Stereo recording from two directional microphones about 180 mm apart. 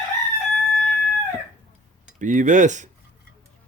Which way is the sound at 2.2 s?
45° right (ahead or behind).